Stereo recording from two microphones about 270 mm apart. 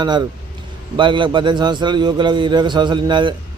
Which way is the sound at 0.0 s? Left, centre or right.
Centre.